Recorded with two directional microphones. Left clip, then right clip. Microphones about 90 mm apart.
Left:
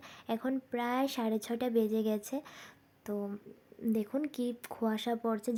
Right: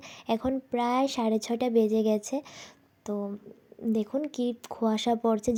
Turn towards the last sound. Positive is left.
turn(degrees=-30)  # may be behind; listen again after turning